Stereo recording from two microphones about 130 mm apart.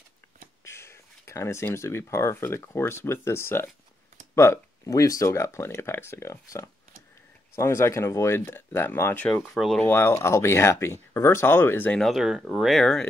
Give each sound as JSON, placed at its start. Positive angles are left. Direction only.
{"t": 0.7, "sound": "speech", "side_deg": 20}
{"t": 9.3, "sound": "speech", "side_deg": 0}
{"t": 9.8, "sound": "speech", "side_deg": 15}
{"t": 12.0, "sound": "speech", "side_deg": 0}